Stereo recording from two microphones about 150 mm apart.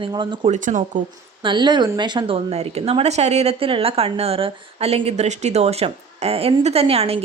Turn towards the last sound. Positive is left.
turn(degrees=-40)  # may be behind; listen again after turning